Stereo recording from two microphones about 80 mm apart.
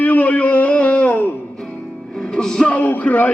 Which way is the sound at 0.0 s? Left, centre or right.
Centre.